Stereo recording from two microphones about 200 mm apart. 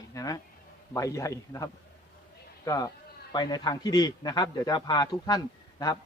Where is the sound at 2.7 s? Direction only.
15° left (ahead or behind).